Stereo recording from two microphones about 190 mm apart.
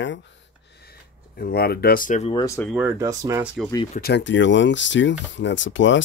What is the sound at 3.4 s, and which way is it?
Speech, centre (ahead or behind).